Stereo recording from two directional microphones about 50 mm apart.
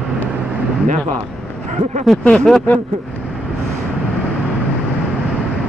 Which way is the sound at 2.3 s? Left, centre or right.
Centre.